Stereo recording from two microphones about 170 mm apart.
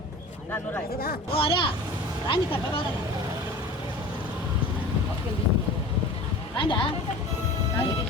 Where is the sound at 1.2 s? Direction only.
35° left (ahead or behind).